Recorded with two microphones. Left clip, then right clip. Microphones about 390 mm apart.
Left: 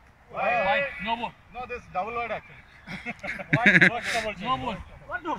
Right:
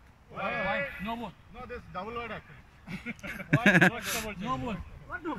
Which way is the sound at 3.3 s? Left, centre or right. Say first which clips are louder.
Left 5 dB; centre.